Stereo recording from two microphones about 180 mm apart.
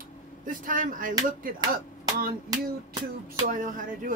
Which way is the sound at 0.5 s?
50° right (ahead or behind).